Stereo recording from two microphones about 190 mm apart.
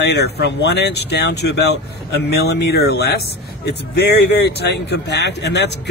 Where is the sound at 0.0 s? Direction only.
60° left (ahead or behind).